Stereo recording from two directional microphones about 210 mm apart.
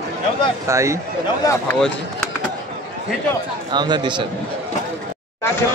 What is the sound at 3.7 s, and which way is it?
Speech, 20° right (ahead or behind).